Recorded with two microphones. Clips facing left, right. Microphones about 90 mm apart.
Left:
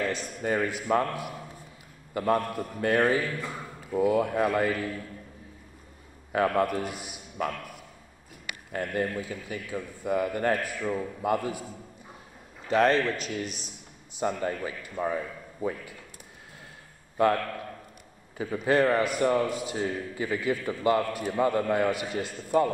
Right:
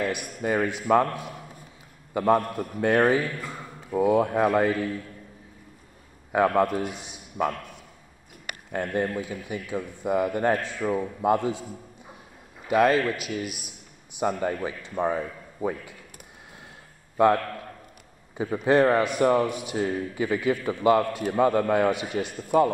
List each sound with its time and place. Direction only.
0.0 s a man's voice: 15° right (ahead or behind)
2.1 s a man's voice: 20° right (ahead or behind)
6.3 s a man's voice: 20° right (ahead or behind)
12.6 s a man's voice: 10° right (ahead or behind)
18.4 s a man's voice: 20° right (ahead or behind)